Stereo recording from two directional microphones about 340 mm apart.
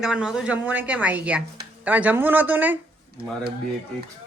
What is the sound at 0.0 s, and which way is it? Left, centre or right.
A woman's voice, centre.